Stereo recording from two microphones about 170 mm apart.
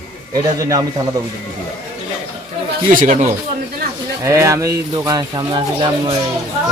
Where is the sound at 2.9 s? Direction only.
45° right (ahead or behind).